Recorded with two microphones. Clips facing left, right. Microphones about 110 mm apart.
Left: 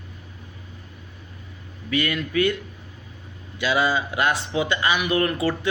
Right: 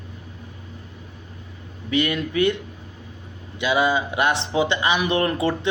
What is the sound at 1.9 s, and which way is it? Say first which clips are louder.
Speech: right 2 dB; 25° right (ahead or behind).